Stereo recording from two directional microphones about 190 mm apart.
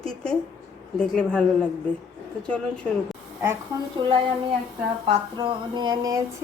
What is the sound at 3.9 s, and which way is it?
A woman's voice, 30° right (ahead or behind).